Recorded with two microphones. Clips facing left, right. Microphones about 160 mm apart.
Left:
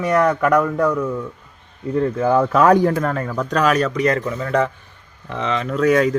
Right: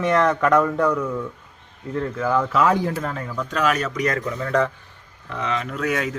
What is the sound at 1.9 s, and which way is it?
Speech, 25° left (ahead or behind).